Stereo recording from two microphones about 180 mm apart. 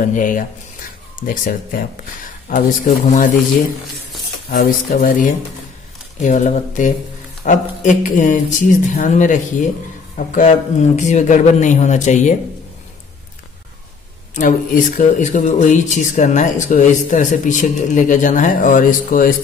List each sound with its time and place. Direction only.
0.1 s speech: 50° left (ahead or behind)
3.8 s a sound: centre (ahead or behind)
4.5 s a man's voice: 55° left (ahead or behind)
14.3 s speech: 45° left (ahead or behind)